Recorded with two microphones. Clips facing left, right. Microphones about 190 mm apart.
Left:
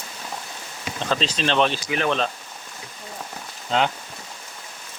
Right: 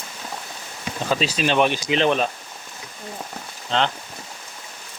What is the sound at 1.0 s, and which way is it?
Speech, 10° right (ahead or behind).